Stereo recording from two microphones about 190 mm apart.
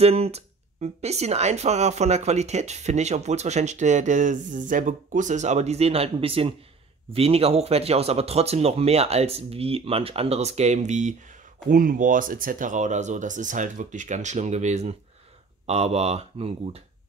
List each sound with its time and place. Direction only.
0.0 s speech: 35° right (ahead or behind)